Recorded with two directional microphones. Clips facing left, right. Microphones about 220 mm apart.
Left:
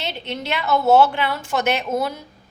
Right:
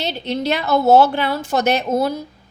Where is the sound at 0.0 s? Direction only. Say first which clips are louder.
Right 6 dB; 35° right (ahead or behind).